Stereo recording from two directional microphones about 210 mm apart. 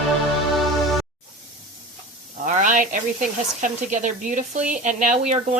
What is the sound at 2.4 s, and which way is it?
A woman's voice, 35° right (ahead or behind).